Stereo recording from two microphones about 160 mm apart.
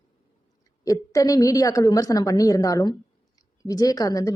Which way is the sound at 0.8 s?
20° left (ahead or behind).